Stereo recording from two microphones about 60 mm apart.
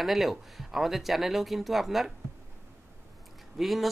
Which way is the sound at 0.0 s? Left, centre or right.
Centre.